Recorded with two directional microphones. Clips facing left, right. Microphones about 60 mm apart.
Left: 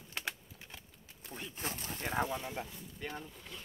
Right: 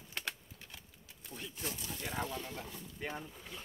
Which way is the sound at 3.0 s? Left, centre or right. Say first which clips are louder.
Right 1 dB; centre.